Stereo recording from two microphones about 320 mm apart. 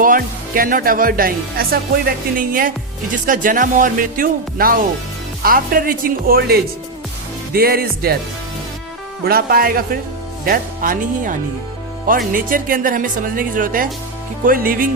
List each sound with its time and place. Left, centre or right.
0.0 s speech: right
9.2 s speech: right